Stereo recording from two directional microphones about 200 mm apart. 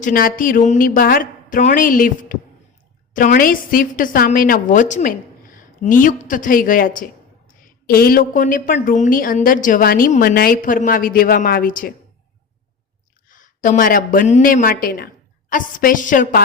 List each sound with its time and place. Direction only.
0.0 s a woman's voice: 45° left (ahead or behind)
13.2 s speech: 40° left (ahead or behind)